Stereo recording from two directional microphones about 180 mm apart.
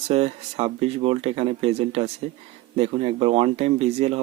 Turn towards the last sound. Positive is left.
turn(degrees=-35)  # may be behind; listen again after turning